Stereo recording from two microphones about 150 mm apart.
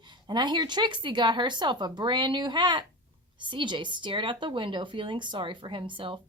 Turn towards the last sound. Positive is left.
turn(degrees=-35)  # may be behind; listen again after turning